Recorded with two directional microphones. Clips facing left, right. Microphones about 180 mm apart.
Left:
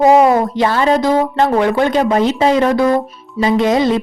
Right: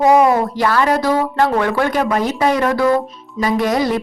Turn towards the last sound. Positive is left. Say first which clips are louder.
# left 3 dB
turn(degrees=20)  # may be behind; listen again after turning